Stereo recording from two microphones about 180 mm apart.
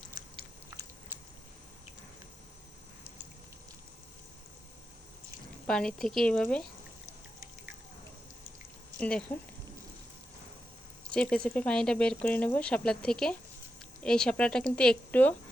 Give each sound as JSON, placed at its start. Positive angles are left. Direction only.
{"t": 5.6, "sound": "speech", "side_deg": 5}
{"t": 9.0, "sound": "speech", "side_deg": 5}
{"t": 11.1, "sound": "speech", "side_deg": 5}